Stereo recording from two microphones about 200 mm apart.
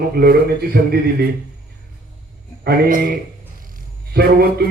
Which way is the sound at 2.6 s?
45° right (ahead or behind).